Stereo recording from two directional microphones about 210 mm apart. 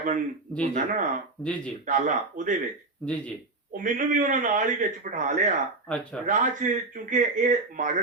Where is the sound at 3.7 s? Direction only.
40° right (ahead or behind).